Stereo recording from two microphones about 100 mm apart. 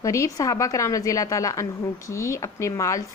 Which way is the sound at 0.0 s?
30° left (ahead or behind).